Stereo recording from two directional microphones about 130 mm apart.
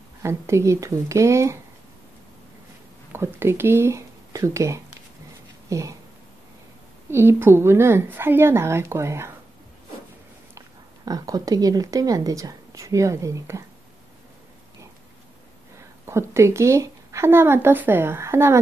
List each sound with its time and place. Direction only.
0.2 s speech: 20° right (ahead or behind)
3.1 s speech: 20° right (ahead or behind)
7.1 s speech: 20° right (ahead or behind)
11.1 s speech: 30° right (ahead or behind)
16.1 s speech: 20° right (ahead or behind)